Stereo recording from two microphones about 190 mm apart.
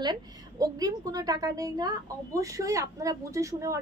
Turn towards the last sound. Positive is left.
turn(degrees=-15)  # may be behind; listen again after turning